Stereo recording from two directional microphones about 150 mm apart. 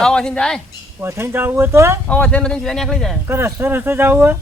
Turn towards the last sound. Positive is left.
turn(degrees=-15)  # may be behind; listen again after turning